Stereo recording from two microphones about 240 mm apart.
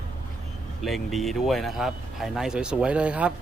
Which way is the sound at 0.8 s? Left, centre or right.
Centre.